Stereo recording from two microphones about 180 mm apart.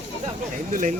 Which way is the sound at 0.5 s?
45° right (ahead or behind).